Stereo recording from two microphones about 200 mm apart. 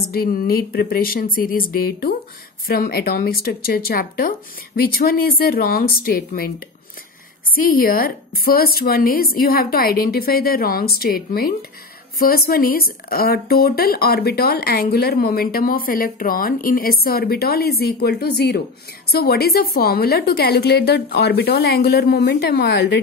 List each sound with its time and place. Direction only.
0.1 s speech: 50° left (ahead or behind)
7.5 s speech: 45° left (ahead or behind)